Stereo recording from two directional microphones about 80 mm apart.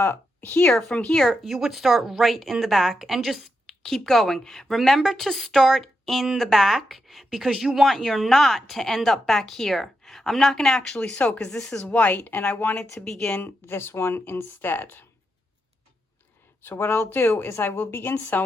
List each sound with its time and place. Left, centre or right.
0.0 s speech: left
0.6 s speech: centre
1.2 s speech: centre
12.7 s speech: centre
13.4 s a woman's voice: left
16.6 s a woman's voice: left